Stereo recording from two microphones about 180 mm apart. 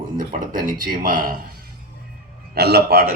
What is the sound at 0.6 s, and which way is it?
Speech, 55° right (ahead or behind).